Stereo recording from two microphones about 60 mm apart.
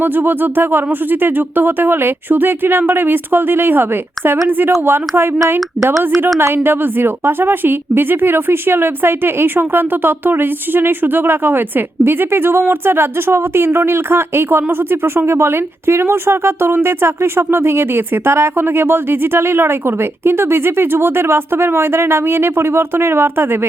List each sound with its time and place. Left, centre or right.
0.0 s a woman's voice: right
6.4 s a woman's voice: right